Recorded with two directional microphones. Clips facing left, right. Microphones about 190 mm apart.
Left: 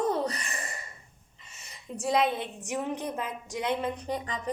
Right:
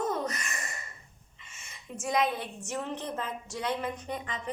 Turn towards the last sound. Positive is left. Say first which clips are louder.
# left 4 dB
turn(degrees=35)  # may be behind; listen again after turning